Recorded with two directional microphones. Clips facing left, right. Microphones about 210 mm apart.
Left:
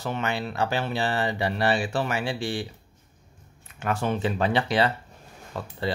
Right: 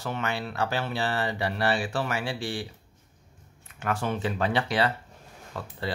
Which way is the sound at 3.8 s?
25° left (ahead or behind).